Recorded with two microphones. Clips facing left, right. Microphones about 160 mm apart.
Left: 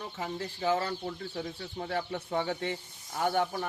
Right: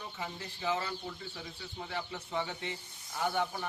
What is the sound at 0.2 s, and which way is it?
Speech, 45° left (ahead or behind).